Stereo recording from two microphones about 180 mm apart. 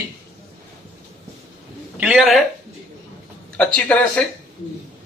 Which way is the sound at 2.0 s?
5° right (ahead or behind).